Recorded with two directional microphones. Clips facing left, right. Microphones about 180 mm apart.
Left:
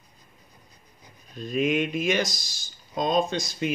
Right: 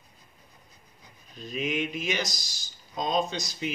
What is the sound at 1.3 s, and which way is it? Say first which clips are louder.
Speech: left 6 dB; 50° left (ahead or behind).